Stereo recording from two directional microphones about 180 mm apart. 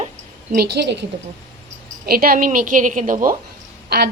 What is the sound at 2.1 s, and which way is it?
A woman's voice, 55° right (ahead or behind).